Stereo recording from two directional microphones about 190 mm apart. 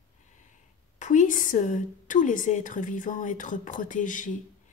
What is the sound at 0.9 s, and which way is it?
A woman's voice, 40° left (ahead or behind).